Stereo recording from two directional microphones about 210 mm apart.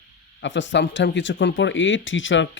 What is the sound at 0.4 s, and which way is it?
Speech, 60° left (ahead or behind).